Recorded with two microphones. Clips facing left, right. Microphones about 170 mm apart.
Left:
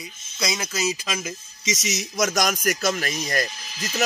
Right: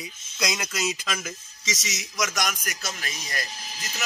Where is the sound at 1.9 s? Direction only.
35° left (ahead or behind).